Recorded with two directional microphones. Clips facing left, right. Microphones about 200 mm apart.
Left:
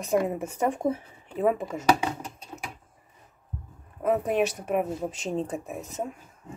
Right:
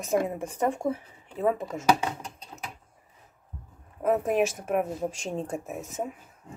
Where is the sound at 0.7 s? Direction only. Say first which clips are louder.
Left 2 dB; 20° left (ahead or behind).